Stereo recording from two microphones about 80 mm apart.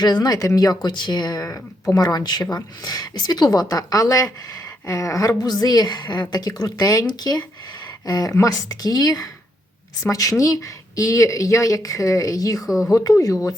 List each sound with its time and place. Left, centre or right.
0.0 s a woman's voice: left
0.9 s a woman's voice: left
12.6 s speech: centre
12.9 s a woman's voice: left